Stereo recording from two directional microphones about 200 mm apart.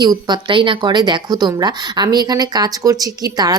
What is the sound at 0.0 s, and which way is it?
Speech, 20° right (ahead or behind).